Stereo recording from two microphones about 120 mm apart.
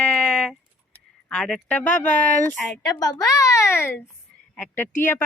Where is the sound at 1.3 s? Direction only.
5° left (ahead or behind).